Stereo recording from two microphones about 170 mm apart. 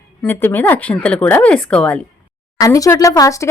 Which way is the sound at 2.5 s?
20° left (ahead or behind).